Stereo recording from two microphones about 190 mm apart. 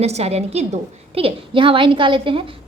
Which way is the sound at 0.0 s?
35° right (ahead or behind).